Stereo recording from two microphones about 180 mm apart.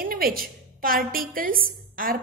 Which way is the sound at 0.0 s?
55° right (ahead or behind).